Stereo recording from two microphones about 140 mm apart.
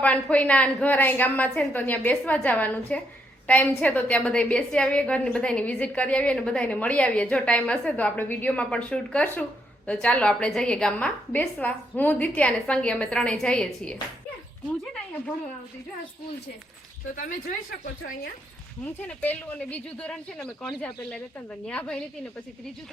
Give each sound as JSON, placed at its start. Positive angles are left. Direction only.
{"t": 0.0, "sound": "a woman's voice", "side_deg": 10}
{"t": 17.2, "sound": "speech", "side_deg": 75}
{"t": 18.9, "sound": "a woman's voice", "side_deg": 10}